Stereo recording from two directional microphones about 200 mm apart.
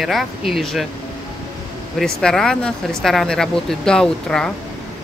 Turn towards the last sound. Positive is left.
turn(degrees=5)  # may be behind; listen again after turning